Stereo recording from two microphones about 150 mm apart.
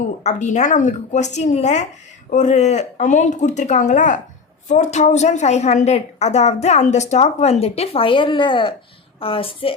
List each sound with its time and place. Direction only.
0.2 s a woman's voice: 50° left (ahead or behind)